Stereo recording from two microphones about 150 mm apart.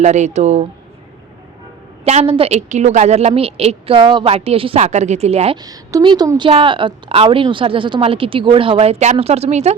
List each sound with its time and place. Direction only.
0.0 s a woman's voice: 50° right (ahead or behind)
2.0 s a woman's voice: 40° right (ahead or behind)
4.8 s a woman's voice: 50° right (ahead or behind)
5.5 s a woman's voice: 25° right (ahead or behind); by 9.7 s 45° right (ahead or behind)